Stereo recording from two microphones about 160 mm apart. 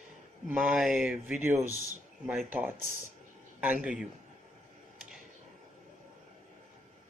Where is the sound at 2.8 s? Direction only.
50° left (ahead or behind).